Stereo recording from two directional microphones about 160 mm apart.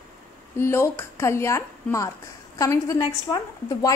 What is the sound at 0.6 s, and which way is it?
A woman's voice, 15° left (ahead or behind).